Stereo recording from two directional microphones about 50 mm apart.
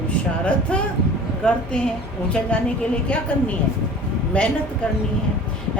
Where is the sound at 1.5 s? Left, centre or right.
Centre.